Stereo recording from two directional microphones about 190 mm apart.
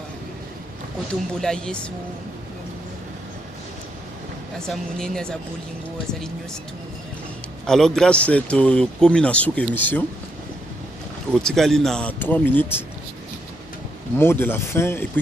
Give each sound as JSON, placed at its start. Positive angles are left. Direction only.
{"t": 1.4, "sound": "speech", "side_deg": 5}
{"t": 4.6, "sound": "speech", "side_deg": 5}
{"t": 7.7, "sound": "speech", "side_deg": 0}
{"t": 11.3, "sound": "speech", "side_deg": 5}
{"t": 14.2, "sound": "speech", "side_deg": 10}